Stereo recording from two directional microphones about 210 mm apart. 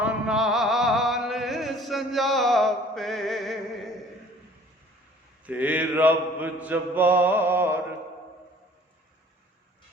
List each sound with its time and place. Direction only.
0.0 s music: 5° right (ahead or behind)
5.5 s mantra: 5° right (ahead or behind)